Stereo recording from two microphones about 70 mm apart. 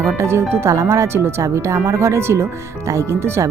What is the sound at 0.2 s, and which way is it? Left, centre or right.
Speech, right.